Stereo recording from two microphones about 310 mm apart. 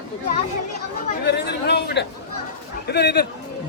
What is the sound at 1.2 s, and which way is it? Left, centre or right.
A man's voice, left.